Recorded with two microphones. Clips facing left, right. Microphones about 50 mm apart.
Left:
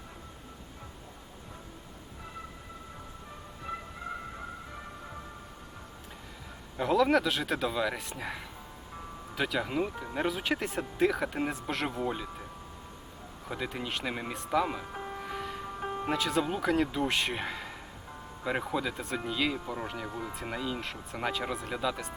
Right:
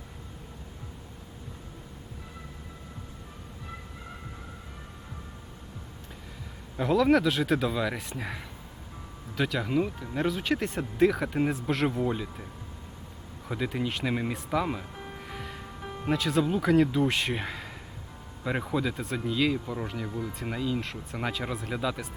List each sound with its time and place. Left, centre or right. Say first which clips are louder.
6.7 s speech: right 2 dB; centre
13.5 s speech: right 4 dB; centre
15.0 s music: left 3 dB; centre
16.0 s speech: right 4 dB; centre
20.1 s speech: right 3 dB; centre
20.3 s speech: right 5 dB; centre